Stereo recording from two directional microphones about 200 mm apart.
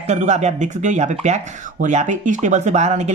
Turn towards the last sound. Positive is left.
turn(degrees=-35)  # may be behind; listen again after turning